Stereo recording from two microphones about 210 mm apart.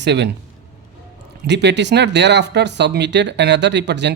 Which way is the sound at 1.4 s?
55° right (ahead or behind).